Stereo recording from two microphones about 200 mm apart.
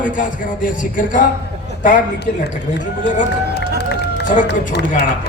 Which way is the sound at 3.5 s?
55° left (ahead or behind).